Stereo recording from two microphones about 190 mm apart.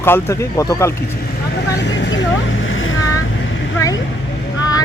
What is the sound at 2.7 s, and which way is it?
Boat, 90° left.